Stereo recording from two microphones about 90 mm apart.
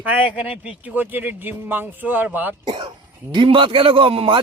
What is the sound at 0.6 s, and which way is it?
Speech, 15° right (ahead or behind).